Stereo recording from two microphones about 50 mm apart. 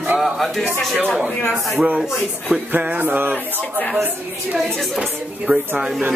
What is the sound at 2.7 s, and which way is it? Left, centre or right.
Music, right.